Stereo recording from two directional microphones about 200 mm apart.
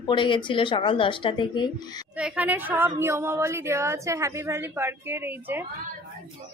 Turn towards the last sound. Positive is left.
turn(degrees=-10)  # may be behind; listen again after turning